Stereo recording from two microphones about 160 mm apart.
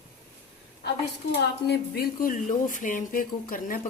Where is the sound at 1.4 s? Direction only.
80° left.